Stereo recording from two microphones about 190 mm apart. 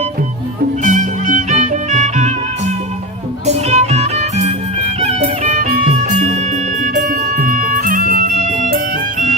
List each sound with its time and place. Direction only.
0.8 s music: 40° right (ahead or behind)